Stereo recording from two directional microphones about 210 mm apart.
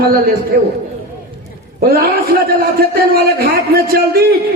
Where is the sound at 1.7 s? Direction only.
45° right (ahead or behind).